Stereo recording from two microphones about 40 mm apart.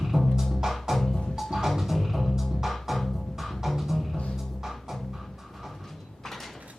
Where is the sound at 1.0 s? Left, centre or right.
Centre.